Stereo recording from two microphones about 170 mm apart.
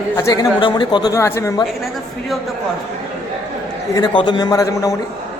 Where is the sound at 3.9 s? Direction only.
25° left (ahead or behind).